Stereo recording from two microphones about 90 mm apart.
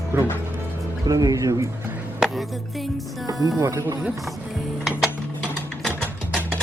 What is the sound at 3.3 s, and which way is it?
Speech, 45° right (ahead or behind).